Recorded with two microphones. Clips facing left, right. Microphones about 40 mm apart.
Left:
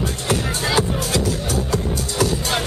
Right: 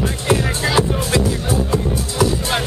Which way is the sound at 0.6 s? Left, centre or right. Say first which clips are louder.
Right 3 dB; centre.